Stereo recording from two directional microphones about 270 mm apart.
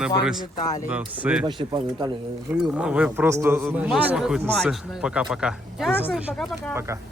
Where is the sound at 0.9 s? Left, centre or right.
Centre.